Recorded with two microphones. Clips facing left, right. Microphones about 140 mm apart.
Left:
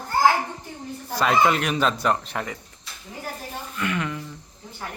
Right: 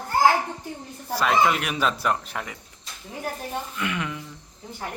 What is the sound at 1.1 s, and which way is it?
Speech, centre (ahead or behind).